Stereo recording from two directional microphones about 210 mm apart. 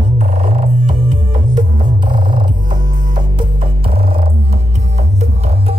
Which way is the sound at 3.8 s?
25° right (ahead or behind).